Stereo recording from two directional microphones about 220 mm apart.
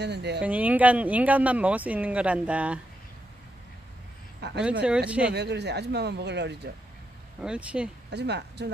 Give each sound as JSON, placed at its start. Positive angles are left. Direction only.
{"t": 0.0, "sound": "speech", "side_deg": -50}
{"t": 0.4, "sound": "speech", "side_deg": -5}
{"t": 4.4, "sound": "speech", "side_deg": -50}
{"t": 4.8, "sound": "speech", "side_deg": -5}
{"t": 5.3, "sound": "speech", "side_deg": -50}
{"t": 7.4, "sound": "speech", "side_deg": -5}
{"t": 8.1, "sound": "speech", "side_deg": -50}